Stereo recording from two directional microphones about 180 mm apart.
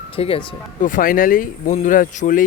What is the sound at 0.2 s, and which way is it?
Speech, 30° left (ahead or behind).